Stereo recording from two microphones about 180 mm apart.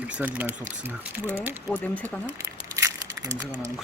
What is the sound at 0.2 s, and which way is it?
Speech, 10° right (ahead or behind).